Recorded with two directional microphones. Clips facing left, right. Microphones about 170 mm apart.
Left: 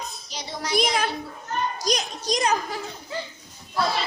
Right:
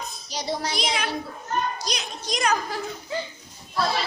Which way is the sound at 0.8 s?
50° left (ahead or behind).